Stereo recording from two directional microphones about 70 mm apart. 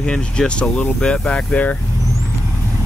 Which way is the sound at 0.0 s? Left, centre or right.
Centre.